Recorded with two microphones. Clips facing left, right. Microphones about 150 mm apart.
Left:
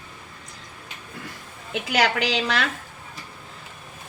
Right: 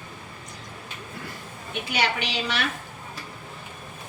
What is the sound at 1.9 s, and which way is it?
Speech, 90° left.